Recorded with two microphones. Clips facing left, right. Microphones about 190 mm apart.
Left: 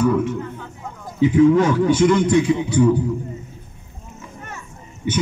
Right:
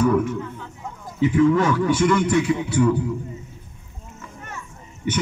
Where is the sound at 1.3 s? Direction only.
20° left (ahead or behind).